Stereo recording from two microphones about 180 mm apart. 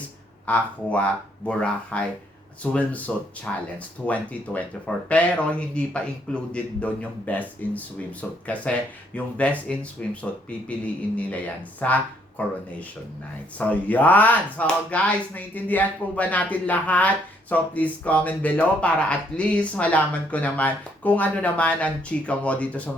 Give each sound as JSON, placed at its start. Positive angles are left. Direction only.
{"t": 0.4, "sound": "speech", "side_deg": 10}
{"t": 3.1, "sound": "speech", "side_deg": 5}
{"t": 9.1, "sound": "speech", "side_deg": 5}
{"t": 13.6, "sound": "speech", "side_deg": 10}